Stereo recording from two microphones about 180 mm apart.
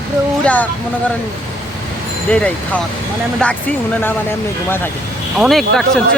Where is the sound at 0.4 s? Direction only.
10° left (ahead or behind).